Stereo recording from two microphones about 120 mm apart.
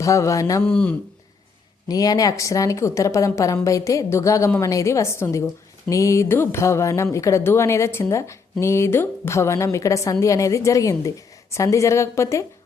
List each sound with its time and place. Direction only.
0.0 s speech: 25° left (ahead or behind)
0.6 s speech: 10° left (ahead or behind)
1.9 s speech: 30° left (ahead or behind)